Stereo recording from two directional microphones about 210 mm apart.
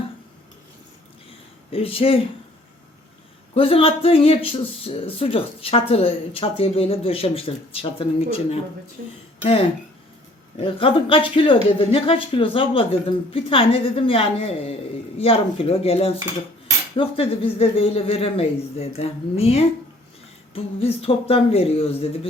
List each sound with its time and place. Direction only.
1.7 s speech: 25° left (ahead or behind)
3.5 s speech: 25° left (ahead or behind)